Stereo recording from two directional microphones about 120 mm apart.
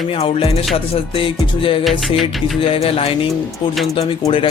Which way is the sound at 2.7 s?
55° left (ahead or behind).